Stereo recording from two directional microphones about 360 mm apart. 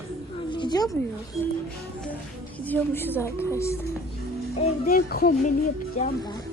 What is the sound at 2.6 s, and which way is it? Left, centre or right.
Speech, centre.